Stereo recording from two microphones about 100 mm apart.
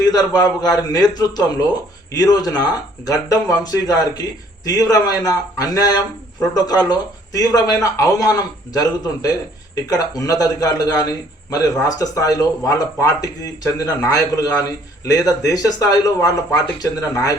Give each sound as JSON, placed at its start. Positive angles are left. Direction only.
{"t": 0.0, "sound": "speech", "side_deg": 40}